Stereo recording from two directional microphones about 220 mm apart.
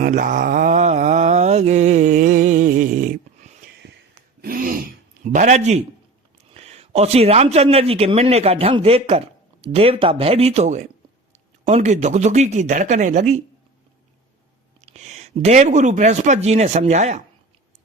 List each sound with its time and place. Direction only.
0.0 s mantra: 35° right (ahead or behind)
4.4 s throat clearing: 40° right (ahead or behind)
5.2 s a man's voice: 35° right (ahead or behind)
14.8 s speech: 30° right (ahead or behind)